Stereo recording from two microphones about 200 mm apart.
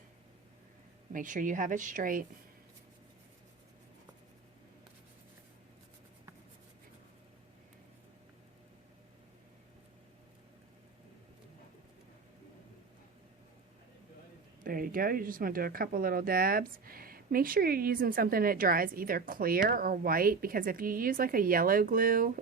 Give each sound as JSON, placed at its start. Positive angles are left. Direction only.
{"t": 1.1, "sound": "speech", "side_deg": -40}
{"t": 14.6, "sound": "speech", "side_deg": -45}